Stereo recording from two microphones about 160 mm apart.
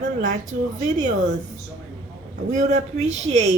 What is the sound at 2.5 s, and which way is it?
Speech, 45° right (ahead or behind).